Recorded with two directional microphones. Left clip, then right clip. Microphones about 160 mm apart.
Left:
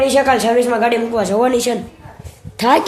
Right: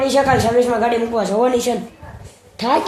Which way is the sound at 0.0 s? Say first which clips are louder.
Left 2 dB; 5° left (ahead or behind).